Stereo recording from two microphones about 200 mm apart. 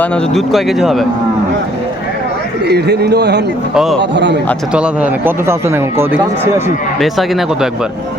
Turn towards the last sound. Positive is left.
turn(degrees=0)  # may be behind; listen again after turning